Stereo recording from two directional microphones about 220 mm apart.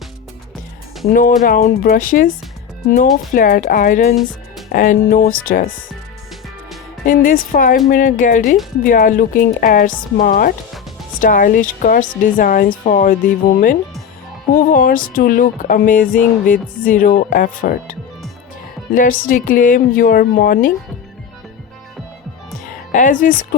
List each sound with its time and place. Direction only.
1.0 s music: 40° left (ahead or behind)
3.3 s music: 40° left (ahead or behind)
7.0 s music: 40° left (ahead or behind)
18.9 s music: 40° left (ahead or behind)
22.9 s speech: 35° left (ahead or behind)